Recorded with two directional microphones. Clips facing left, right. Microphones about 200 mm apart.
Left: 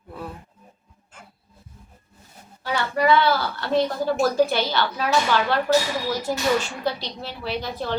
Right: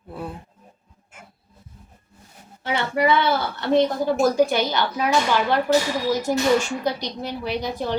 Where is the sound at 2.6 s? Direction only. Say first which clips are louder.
Even; 20° right (ahead or behind).